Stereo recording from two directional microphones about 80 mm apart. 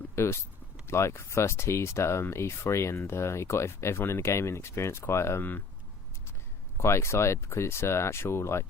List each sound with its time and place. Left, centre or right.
0.2 s speech: left
6.7 s speech: left